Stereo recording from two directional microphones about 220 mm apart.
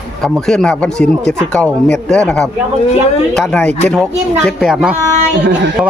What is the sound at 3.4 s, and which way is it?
A man's voice, 5° left (ahead or behind).